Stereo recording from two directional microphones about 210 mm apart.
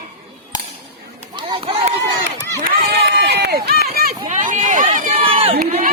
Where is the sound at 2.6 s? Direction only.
50° right (ahead or behind).